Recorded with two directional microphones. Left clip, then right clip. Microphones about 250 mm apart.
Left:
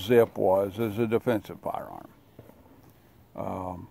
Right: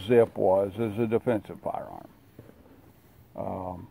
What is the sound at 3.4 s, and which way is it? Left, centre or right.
Speech, centre.